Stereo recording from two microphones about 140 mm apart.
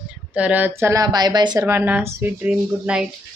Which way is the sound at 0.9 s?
30° right (ahead or behind).